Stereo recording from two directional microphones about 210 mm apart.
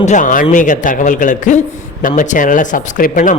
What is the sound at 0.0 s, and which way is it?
A man's voice, 35° left (ahead or behind).